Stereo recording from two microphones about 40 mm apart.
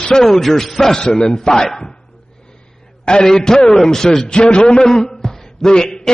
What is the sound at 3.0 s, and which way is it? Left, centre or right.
A man's voice, left.